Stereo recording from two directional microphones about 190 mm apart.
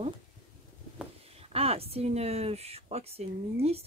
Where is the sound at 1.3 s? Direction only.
30° right (ahead or behind).